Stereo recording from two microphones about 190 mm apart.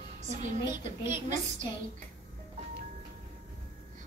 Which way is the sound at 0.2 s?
40° right (ahead or behind).